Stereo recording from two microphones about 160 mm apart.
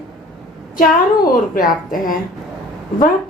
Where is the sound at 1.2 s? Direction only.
60° left (ahead or behind).